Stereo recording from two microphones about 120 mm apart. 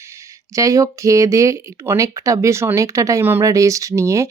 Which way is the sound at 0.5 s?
25° right (ahead or behind).